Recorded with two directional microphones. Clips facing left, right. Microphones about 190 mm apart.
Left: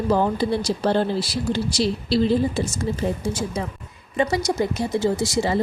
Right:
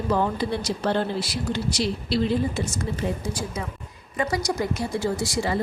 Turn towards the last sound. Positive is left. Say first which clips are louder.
# left 4 dB
turn(degrees=20)  # may be behind; listen again after turning